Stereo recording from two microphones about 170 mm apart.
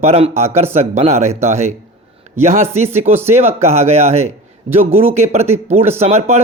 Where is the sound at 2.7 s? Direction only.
40° right (ahead or behind).